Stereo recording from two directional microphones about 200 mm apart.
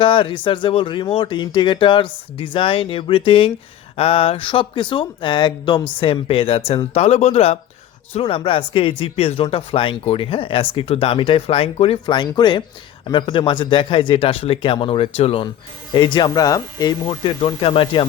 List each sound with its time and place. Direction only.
0.0 s speech: 25° left (ahead or behind)